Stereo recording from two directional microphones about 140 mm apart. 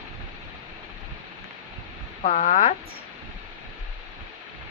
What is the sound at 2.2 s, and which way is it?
Speech, 60° left (ahead or behind).